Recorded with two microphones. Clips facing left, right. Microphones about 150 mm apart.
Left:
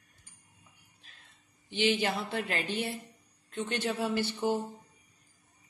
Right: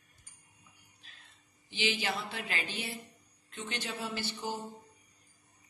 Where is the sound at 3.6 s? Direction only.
55° left (ahead or behind).